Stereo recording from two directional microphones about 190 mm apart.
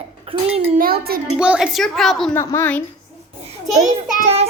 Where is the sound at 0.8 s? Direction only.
55° right (ahead or behind).